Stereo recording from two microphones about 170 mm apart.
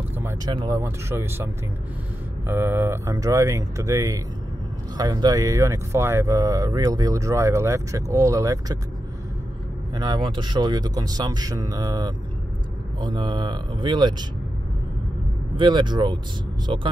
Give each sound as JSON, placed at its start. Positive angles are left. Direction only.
{"t": 0.5, "sound": "speech", "side_deg": -20}
{"t": 9.9, "sound": "speech", "side_deg": -25}
{"t": 15.5, "sound": "speech", "side_deg": -30}